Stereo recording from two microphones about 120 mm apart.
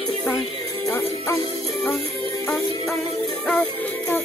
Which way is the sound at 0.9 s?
20° left (ahead or behind).